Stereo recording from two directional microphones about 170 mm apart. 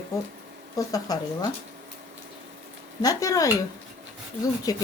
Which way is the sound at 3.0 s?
20° left (ahead or behind).